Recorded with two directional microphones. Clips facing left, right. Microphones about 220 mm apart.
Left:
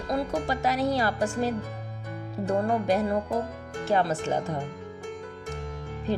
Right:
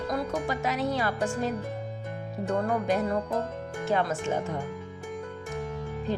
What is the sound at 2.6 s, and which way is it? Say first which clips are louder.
Speech: left 1 dB; 30° left (ahead or behind).